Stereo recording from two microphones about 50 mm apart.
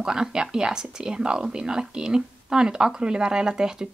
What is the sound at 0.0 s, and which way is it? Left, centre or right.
Speech, centre.